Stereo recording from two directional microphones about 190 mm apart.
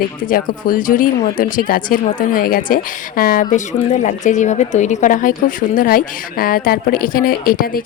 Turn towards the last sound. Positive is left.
turn(degrees=50)  # may be behind; listen again after turning